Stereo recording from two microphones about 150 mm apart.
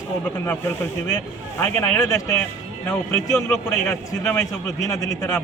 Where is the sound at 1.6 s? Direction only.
15° left (ahead or behind).